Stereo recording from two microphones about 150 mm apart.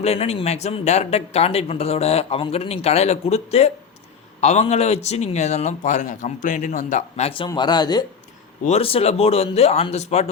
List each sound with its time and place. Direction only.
0.0 s speech: 45° left (ahead or behind); by 8.0 s 25° left (ahead or behind)
8.7 s speech: 40° left (ahead or behind)